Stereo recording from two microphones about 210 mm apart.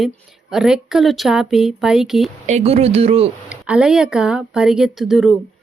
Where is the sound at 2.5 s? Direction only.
30° right (ahead or behind).